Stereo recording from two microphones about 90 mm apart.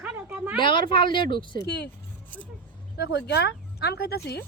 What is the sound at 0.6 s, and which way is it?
Speech, 65° left (ahead or behind).